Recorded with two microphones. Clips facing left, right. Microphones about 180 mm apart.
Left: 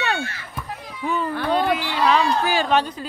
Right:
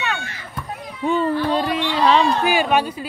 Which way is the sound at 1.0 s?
25° right (ahead or behind).